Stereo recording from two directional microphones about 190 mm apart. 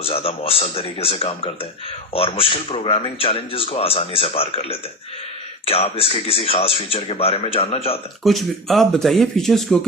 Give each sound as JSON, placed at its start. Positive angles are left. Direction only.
{"t": 0.0, "sound": "speech", "side_deg": 30}
{"t": 8.2, "sound": "speech", "side_deg": 0}